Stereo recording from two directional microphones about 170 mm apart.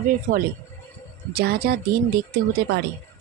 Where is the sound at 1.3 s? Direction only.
65° right (ahead or behind).